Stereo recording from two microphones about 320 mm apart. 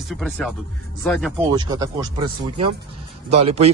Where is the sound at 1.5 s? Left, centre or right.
Centre.